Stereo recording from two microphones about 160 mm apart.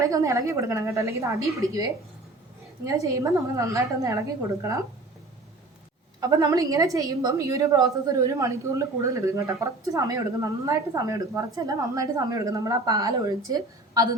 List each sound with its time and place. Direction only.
0.0 s a woman's voice: 20° right (ahead or behind)
2.8 s a woman's voice: 20° right (ahead or behind)
6.1 s a woman's voice: 25° right (ahead or behind)